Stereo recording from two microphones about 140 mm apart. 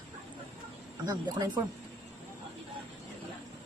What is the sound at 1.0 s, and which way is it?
Speech, 25° right (ahead or behind).